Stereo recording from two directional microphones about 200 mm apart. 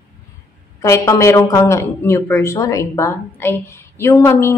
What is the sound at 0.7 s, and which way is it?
Speech, 15° left (ahead or behind).